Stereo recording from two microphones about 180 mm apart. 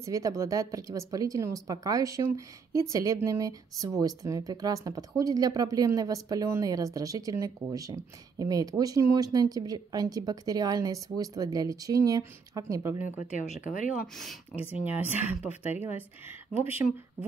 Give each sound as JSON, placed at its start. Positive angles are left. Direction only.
{"t": 0.0, "sound": "speech", "side_deg": -20}
{"t": 13.2, "sound": "speech", "side_deg": 45}
{"t": 14.9, "sound": "speech", "side_deg": -10}